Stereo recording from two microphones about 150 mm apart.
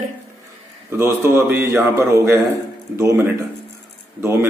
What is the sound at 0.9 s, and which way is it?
Speech, 15° right (ahead or behind).